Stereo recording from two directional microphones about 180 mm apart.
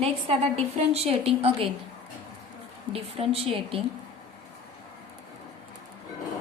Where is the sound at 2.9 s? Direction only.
30° right (ahead or behind).